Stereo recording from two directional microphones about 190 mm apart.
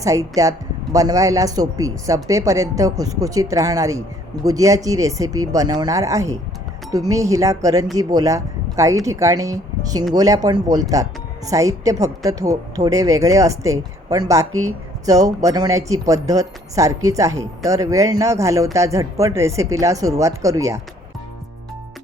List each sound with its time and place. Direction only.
0.0 s speech: 15° right (ahead or behind)